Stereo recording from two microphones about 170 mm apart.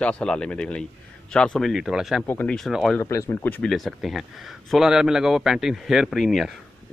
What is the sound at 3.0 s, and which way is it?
Speech, 15° left (ahead or behind).